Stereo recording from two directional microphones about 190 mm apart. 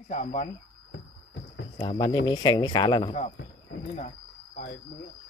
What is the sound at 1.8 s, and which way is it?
Speech, 25° left (ahead or behind).